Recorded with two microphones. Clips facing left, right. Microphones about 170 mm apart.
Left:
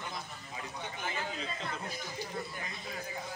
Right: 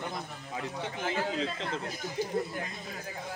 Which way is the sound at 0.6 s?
90° right.